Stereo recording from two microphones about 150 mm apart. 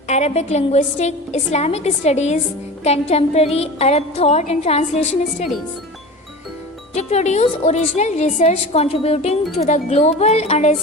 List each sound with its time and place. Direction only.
0.1 s a woman's voice: 50° left (ahead or behind)
6.9 s a woman's voice: 50° left (ahead or behind)